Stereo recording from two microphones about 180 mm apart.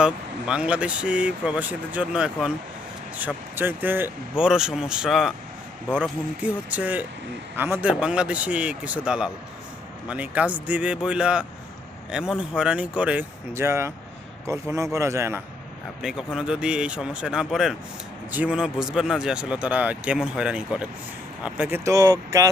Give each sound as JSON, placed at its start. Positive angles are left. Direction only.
{"t": 0.0, "sound": "speech", "side_deg": -5}
{"t": 16.0, "sound": "speech", "side_deg": -5}